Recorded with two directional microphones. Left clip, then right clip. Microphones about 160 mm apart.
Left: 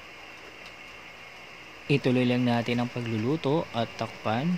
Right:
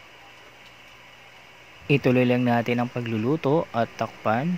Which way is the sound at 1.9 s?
30° right (ahead or behind).